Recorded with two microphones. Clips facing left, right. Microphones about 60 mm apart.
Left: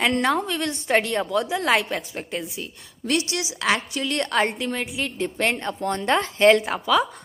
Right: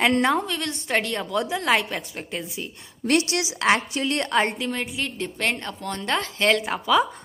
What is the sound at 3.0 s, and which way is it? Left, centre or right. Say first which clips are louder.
Speech: right 3 dB; right.